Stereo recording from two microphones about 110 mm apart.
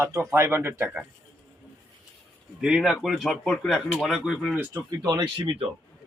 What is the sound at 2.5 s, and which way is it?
Speech, 5° right (ahead or behind).